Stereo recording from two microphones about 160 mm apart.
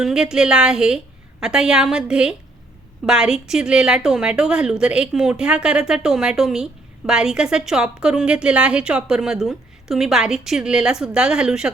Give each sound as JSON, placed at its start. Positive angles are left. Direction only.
{"t": 0.0, "sound": "a woman's voice", "side_deg": -5}